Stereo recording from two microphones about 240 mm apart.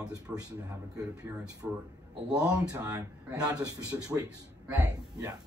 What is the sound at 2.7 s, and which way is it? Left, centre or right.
A man's voice, centre.